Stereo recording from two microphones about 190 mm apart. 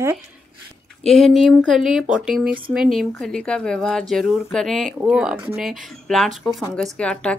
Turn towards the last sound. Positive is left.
turn(degrees=5)  # may be behind; listen again after turning